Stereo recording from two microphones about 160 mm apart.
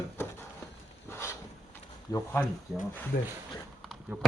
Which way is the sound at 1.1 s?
15° left (ahead or behind).